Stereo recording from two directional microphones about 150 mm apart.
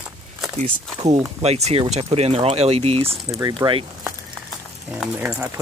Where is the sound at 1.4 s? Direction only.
45° right (ahead or behind).